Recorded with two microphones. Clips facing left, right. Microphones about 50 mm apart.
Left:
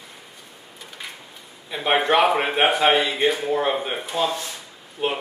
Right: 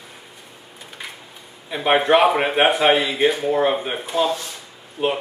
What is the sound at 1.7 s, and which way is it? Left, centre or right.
Speech, centre.